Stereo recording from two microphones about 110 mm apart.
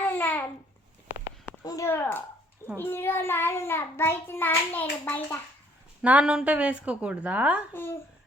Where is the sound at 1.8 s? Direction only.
20° left (ahead or behind).